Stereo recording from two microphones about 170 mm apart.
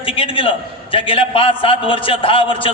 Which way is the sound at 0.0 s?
30° left (ahead or behind).